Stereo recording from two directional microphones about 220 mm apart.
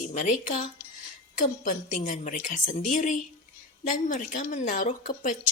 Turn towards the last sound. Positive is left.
turn(degrees=35)  # may be behind; listen again after turning